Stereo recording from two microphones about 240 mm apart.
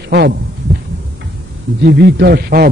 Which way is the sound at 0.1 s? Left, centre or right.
Right.